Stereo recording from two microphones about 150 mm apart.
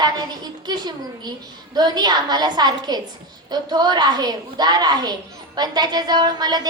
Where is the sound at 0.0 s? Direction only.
25° right (ahead or behind).